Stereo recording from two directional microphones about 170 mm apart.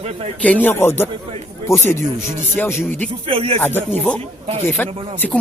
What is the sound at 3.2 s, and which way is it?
Speech, 35° right (ahead or behind).